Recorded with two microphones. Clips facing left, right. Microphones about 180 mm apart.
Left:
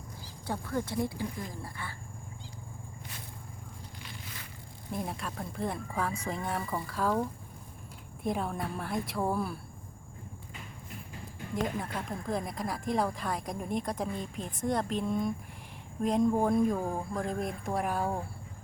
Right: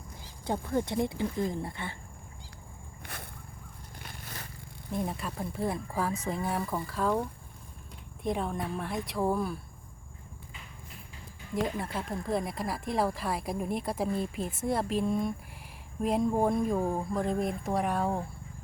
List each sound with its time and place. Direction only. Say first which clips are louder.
0.4 s speech: right 4 dB; 20° right (ahead or behind)
3.0 s a sound: right 6 dB; 60° right (ahead or behind)
4.0 s a sound: right 4 dB; 50° right (ahead or behind)
4.9 s speech: right 3 dB; centre (ahead or behind)
8.2 s speech: right 1 dB; centre (ahead or behind)
11.5 s speech: right 2 dB; centre (ahead or behind)